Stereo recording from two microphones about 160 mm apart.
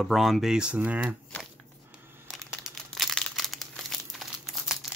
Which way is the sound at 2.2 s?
Centre (ahead or behind).